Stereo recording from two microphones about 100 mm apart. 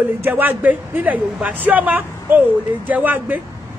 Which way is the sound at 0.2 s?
20° right (ahead or behind).